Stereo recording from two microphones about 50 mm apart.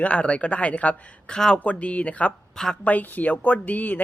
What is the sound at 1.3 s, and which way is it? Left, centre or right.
Speech, centre.